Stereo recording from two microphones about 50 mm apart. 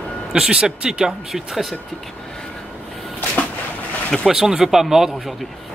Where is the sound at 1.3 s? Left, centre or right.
Centre.